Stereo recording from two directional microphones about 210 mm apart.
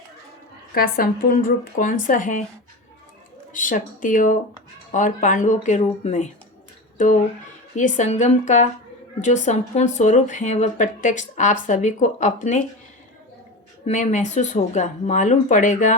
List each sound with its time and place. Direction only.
0.7 s speech: 45° left (ahead or behind)
3.5 s speech: 40° left (ahead or behind)
7.8 s speech: 35° left (ahead or behind)
13.8 s speech: 35° left (ahead or behind)